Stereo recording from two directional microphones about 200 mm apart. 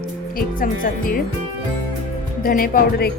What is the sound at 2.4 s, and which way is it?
Speech, 45° left (ahead or behind).